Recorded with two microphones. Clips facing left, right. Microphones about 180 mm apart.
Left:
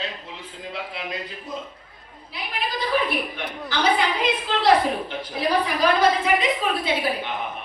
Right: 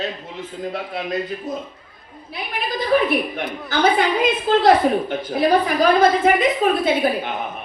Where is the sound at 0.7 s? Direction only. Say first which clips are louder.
Right 6 dB; 45° right (ahead or behind).